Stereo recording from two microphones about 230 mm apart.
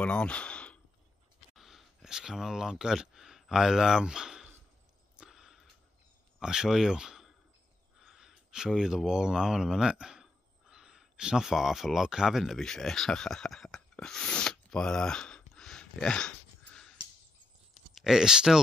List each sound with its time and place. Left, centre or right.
0.0 s speech: centre
1.5 s a sound: centre
6.4 s speech: centre
17.9 s speech: centre